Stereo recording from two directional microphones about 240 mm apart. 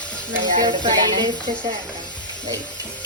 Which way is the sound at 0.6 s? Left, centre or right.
Centre.